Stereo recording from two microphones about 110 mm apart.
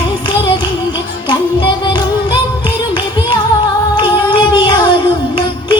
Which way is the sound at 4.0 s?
45° left (ahead or behind).